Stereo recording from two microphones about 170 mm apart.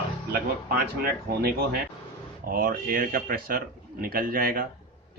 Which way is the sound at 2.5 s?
55° right (ahead or behind).